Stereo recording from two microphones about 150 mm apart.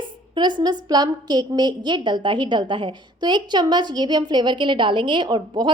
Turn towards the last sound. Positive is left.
turn(degrees=-30)  # may be behind; listen again after turning